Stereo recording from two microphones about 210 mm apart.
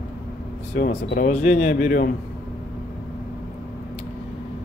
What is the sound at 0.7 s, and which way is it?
Speech, 45° left (ahead or behind).